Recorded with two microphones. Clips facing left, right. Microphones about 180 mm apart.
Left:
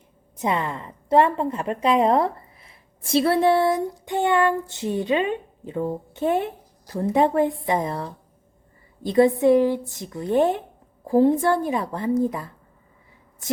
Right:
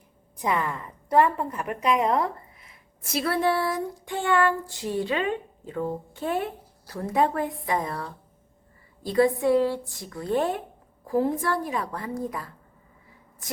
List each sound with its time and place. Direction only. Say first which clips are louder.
0.3 s a woman's voice: left 2 dB; 25° left (ahead or behind)